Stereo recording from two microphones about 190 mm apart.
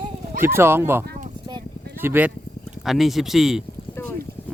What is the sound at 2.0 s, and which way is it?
Speech, 10° right (ahead or behind).